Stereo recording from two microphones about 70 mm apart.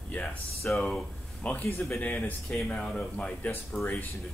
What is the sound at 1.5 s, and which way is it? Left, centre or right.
Speech, left.